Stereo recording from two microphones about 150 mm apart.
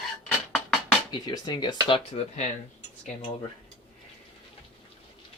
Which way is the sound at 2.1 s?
50° left (ahead or behind).